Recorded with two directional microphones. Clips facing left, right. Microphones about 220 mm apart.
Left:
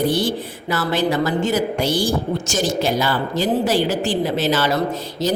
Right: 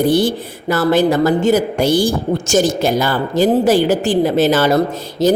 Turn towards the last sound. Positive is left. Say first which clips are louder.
# right 7 dB
turn(degrees=-50)  # may be behind; listen again after turning